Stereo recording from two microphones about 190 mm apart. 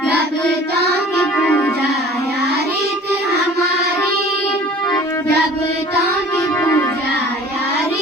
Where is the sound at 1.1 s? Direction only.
10° left (ahead or behind).